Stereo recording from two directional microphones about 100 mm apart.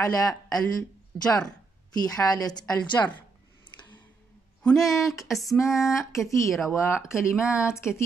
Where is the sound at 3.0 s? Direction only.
25° left (ahead or behind).